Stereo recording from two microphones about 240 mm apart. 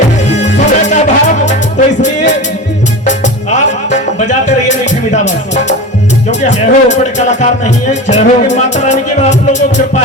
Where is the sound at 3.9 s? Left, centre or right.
Left.